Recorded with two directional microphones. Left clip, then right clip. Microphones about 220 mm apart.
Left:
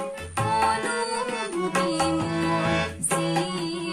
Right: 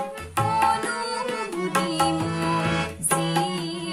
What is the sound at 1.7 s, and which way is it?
Music, 40° right (ahead or behind).